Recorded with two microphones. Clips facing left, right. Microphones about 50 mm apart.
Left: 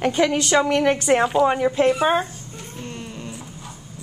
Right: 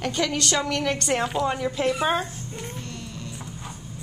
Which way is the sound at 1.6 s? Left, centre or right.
Left.